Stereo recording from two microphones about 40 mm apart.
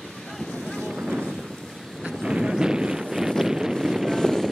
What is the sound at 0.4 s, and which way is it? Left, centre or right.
Boat, centre.